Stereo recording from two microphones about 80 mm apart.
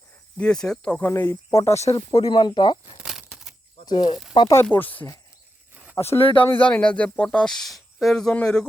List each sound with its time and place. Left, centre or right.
0.3 s speech: centre
1.0 s speech: left
1.5 s speech: left
2.0 s speech: left
2.3 s speech: left
3.0 s a sound: centre
3.8 s speech: left
4.7 s speech: left
6.0 s speech: left
6.4 s speech: left; by 8.3 s centre
8.3 s speech: centre